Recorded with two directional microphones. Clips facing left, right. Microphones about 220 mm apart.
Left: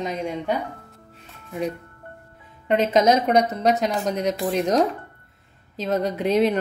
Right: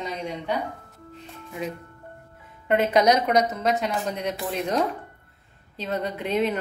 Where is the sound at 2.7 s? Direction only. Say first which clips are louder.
Left 2 dB; 20° left (ahead or behind).